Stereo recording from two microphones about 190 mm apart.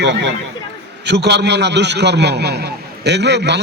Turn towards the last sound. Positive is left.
turn(degrees=-65)  # may be behind; listen again after turning